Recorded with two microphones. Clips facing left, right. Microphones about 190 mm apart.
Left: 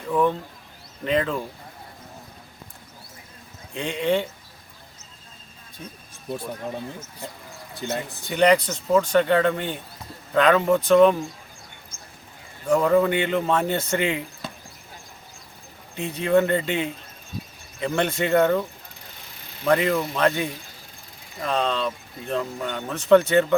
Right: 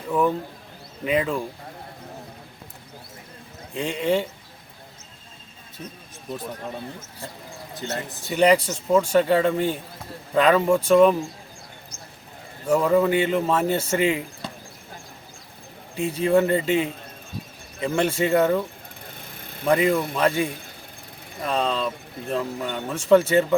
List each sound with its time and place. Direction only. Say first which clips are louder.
0.1 s speech: even; 5° right (ahead or behind)
3.8 s speech: even; 5° right (ahead or behind)
7.8 s speech: left 2 dB; 15° left (ahead or behind)
8.2 s speech: right 1 dB; 5° right (ahead or behind)
12.6 s speech: even; 5° right (ahead or behind)
16.0 s speech: right 1 dB; 5° right (ahead or behind)
19.0 s vehicle: right 5 dB; 55° right (ahead or behind)
19.6 s speech: right 1 dB; 5° right (ahead or behind)